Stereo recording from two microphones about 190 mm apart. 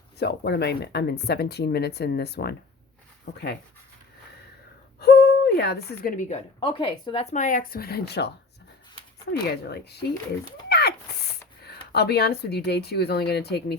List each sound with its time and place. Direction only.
0.2 s speech: 60° left (ahead or behind)
4.9 s a sound: 55° left (ahead or behind)
6.0 s a woman's voice: 45° left (ahead or behind)
9.3 s speech: 60° left (ahead or behind)
10.7 s a sound: 60° left (ahead or behind)
11.6 s speech: 60° left (ahead or behind)